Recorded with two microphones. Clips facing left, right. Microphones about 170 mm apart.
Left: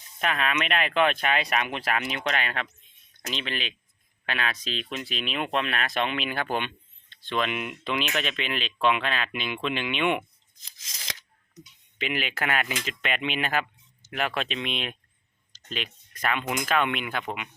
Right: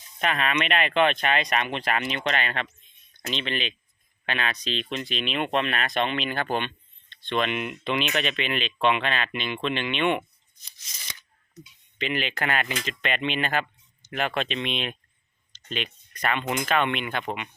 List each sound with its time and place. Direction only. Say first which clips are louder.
0.2 s speech: right 1 dB; centre (ahead or behind)
10.6 s tearing: left 2 dB; 90° left
11.9 s speech: right 2 dB; 5° left (ahead or behind)